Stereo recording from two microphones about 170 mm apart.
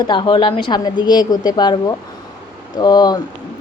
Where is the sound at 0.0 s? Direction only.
25° left (ahead or behind).